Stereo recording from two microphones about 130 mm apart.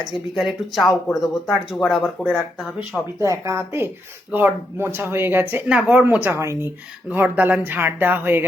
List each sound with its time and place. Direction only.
0.0 s speech: centre (ahead or behind)
3.2 s speech: 20° right (ahead or behind)